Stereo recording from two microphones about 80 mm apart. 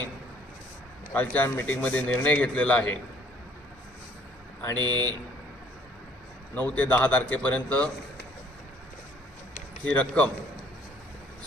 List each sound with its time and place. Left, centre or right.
1.1 s a man's voice: left
4.8 s speech: right
6.5 s a man's voice: centre
9.8 s a man's voice: centre